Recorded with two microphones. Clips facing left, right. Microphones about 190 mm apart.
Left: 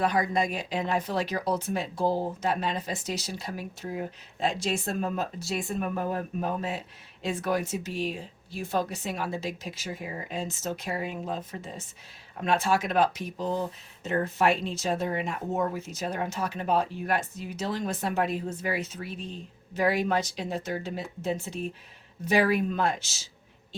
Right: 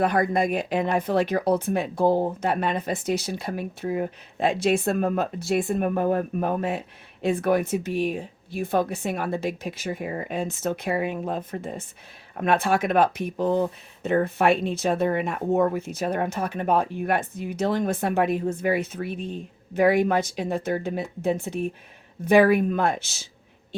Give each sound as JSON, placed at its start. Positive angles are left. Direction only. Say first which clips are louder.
{"t": 0.0, "sound": "speech", "louder": "right 4 dB", "side_deg": -55}